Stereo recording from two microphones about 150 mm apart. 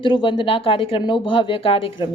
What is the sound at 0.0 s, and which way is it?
Speech, 35° left (ahead or behind).